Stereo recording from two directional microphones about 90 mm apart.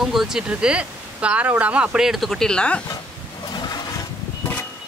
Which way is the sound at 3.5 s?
50° left (ahead or behind).